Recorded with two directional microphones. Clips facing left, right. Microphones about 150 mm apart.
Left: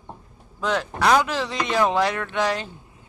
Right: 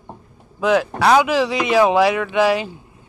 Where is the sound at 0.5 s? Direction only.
10° right (ahead or behind).